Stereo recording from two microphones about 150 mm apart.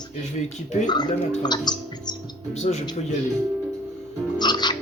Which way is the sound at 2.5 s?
50° left (ahead or behind).